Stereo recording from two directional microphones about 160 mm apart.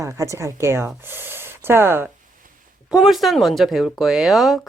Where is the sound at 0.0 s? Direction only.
20° right (ahead or behind).